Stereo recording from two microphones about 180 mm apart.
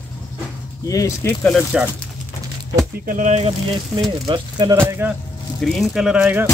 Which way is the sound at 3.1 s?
40° right (ahead or behind).